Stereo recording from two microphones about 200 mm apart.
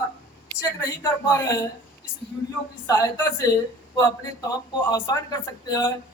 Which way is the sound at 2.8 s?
15° left (ahead or behind).